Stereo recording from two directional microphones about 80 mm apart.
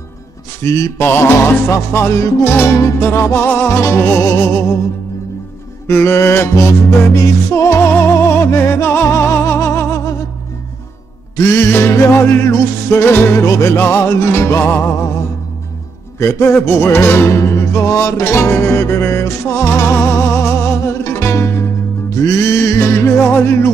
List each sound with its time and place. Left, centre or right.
0.6 s music: left
0.9 s music: left
5.9 s music: left
11.3 s music: left
16.2 s music: left